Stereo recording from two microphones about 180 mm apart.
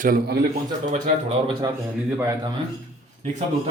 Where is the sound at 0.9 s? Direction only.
40° right (ahead or behind).